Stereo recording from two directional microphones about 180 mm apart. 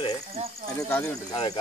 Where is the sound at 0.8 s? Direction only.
15° left (ahead or behind).